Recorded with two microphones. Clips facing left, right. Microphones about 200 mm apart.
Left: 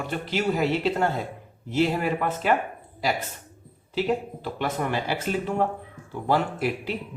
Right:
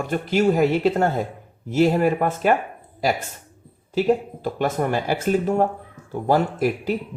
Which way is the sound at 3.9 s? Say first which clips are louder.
Right 5 dB; 45° right (ahead or behind).